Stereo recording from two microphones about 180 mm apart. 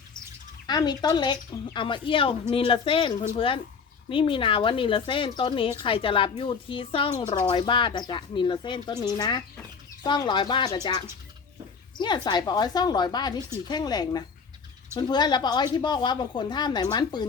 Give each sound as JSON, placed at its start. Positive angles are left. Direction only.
{"t": 0.7, "sound": "a woman's voice", "side_deg": 20}
{"t": 11.9, "sound": "a woman's voice", "side_deg": 25}